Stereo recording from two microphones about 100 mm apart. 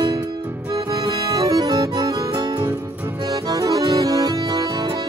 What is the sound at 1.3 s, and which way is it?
Music, 35° right (ahead or behind).